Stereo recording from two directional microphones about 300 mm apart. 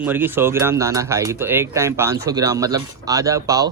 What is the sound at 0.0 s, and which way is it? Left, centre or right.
Speech, centre.